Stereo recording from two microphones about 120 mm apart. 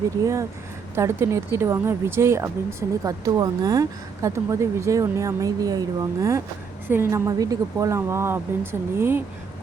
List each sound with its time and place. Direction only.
0.2 s speech: 25° right (ahead or behind)
6.8 s speech: 20° right (ahead or behind)